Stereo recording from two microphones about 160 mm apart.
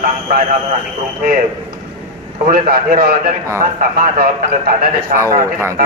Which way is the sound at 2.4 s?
60° right (ahead or behind).